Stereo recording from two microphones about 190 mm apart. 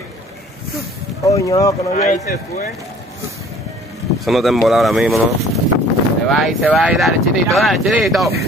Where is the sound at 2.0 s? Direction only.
40° left (ahead or behind).